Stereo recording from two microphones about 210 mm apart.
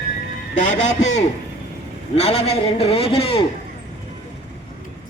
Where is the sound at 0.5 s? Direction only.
35° left (ahead or behind).